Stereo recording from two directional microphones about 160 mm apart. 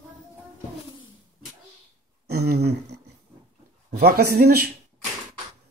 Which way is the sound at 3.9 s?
90° right.